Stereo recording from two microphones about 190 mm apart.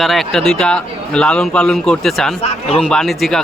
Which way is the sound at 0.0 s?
Centre (ahead or behind).